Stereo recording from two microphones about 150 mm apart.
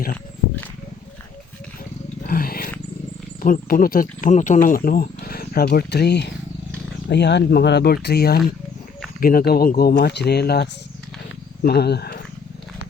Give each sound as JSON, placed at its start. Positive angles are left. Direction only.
{"t": 2.2, "sound": "roaring cats", "side_deg": 80}
{"t": 3.4, "sound": "speech", "side_deg": 65}